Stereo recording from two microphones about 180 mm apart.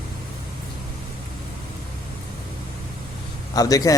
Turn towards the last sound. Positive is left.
turn(degrees=20)  # may be behind; listen again after turning